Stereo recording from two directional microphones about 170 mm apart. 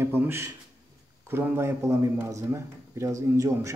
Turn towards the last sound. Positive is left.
turn(degrees=-20)  # may be behind; listen again after turning